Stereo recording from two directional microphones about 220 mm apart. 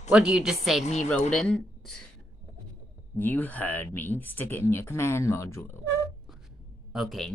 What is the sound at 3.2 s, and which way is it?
Speech, 10° left (ahead or behind).